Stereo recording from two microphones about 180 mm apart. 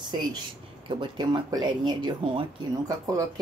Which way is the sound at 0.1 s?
25° right (ahead or behind).